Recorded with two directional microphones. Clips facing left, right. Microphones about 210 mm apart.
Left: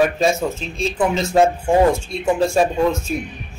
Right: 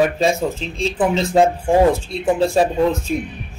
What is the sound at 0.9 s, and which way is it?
Speech, 20° right (ahead or behind).